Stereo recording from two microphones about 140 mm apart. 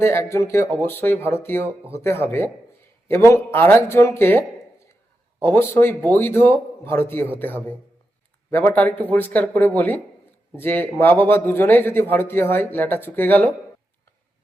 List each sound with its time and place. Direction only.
0.0 s a man's voice: 20° left (ahead or behind)